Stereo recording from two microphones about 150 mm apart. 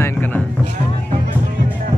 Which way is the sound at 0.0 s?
10° left (ahead or behind).